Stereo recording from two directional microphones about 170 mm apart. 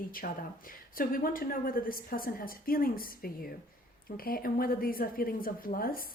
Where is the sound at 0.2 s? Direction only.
60° left (ahead or behind).